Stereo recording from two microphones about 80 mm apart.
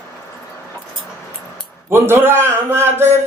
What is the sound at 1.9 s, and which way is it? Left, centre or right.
A man's voice, right.